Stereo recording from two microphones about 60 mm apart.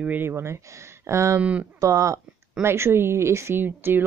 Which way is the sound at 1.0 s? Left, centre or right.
Right.